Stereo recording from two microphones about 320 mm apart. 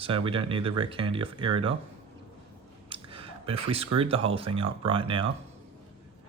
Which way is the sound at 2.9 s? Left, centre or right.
Centre.